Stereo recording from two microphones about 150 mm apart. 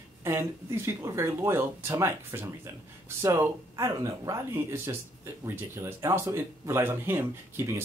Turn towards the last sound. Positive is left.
turn(degrees=-15)  # may be behind; listen again after turning